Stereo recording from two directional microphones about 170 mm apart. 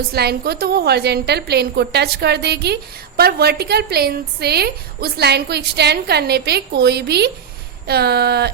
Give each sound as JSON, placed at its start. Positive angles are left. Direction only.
{"t": 0.1, "sound": "a woman's voice", "side_deg": -70}